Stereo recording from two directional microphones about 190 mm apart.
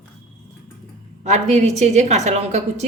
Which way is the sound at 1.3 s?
35° right (ahead or behind).